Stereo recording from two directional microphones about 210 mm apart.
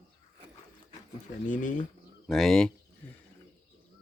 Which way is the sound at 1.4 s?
40° left (ahead or behind).